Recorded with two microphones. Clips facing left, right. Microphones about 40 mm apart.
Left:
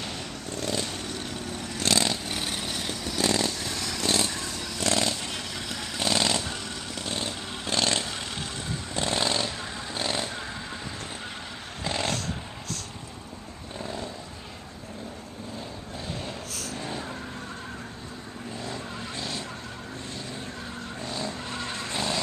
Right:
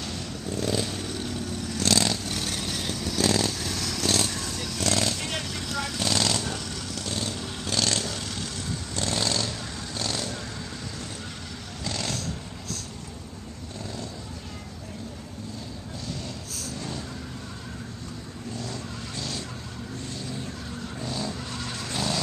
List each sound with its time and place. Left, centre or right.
0.5 s vehicle: centre
8.9 s a sound: centre
9.9 s vehicle: left
11.8 s vehicle: left
13.7 s vehicle: left
16.3 s vehicle: left
18.6 s vehicle: centre
21.0 s vehicle: centre